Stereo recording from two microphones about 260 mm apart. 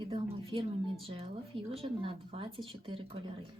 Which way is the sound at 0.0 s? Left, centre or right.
Right.